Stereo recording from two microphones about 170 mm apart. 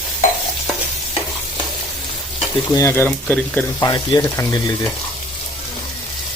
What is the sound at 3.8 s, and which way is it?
Speech, 20° left (ahead or behind).